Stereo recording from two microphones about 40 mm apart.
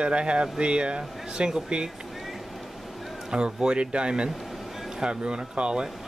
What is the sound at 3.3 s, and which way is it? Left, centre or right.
Speech, right.